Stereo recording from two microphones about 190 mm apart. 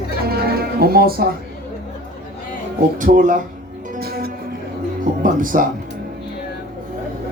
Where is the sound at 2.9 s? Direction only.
45° right (ahead or behind).